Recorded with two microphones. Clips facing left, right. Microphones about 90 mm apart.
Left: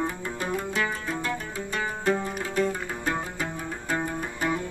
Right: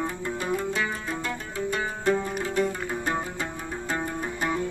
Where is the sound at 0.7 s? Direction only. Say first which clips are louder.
Even; 5° right (ahead or behind).